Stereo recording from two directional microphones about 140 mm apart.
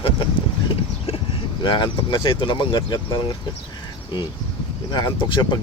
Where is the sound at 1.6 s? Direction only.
35° left (ahead or behind).